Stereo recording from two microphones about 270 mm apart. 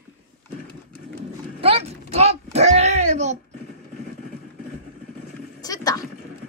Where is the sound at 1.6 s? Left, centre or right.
Right.